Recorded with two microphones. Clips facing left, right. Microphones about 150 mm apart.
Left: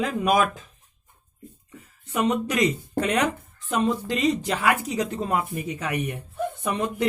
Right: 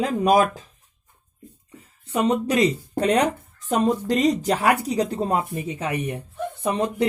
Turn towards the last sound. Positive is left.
turn(degrees=-30)  # may be behind; listen again after turning